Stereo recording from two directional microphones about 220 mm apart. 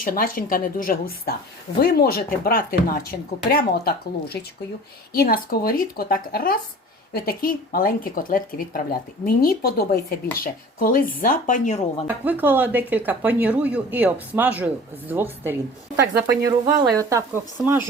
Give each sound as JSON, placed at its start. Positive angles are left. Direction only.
{"t": 0.0, "sound": "speech", "side_deg": 40}
{"t": 12.0, "sound": "speech", "side_deg": -10}